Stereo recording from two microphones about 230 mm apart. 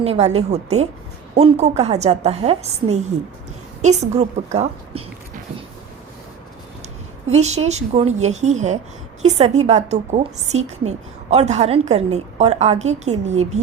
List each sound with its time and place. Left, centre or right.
0.0 s a woman's voice: right
3.8 s a woman's voice: right
7.3 s a woman's voice: right